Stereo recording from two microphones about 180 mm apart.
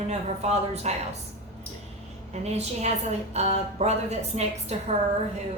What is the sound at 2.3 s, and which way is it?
A woman's voice, 35° right (ahead or behind).